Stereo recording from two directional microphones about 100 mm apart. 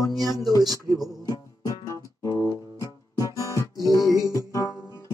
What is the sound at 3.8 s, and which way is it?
Music, 35° left (ahead or behind).